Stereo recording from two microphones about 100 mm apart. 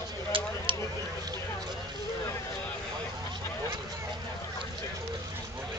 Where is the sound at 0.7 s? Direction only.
60° right (ahead or behind).